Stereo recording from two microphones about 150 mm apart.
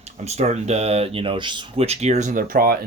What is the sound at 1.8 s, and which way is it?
Speech, 45° right (ahead or behind).